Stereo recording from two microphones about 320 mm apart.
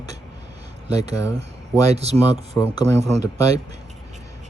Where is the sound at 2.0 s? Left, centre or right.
Centre.